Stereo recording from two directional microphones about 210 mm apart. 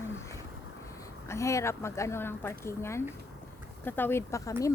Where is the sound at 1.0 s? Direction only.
15° left (ahead or behind).